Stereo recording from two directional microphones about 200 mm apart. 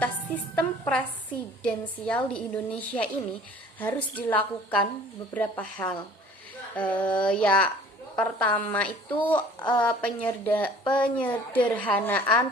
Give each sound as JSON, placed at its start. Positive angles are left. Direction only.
{"t": 0.0, "sound": "a woman's voice", "side_deg": 5}
{"t": 9.6, "sound": "a woman's voice", "side_deg": 25}
{"t": 9.8, "sound": "speech", "side_deg": 5}